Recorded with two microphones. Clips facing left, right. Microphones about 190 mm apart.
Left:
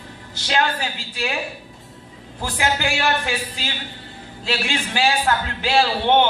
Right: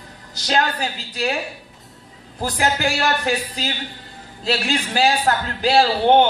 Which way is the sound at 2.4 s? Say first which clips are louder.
Right 2 dB; 40° right (ahead or behind).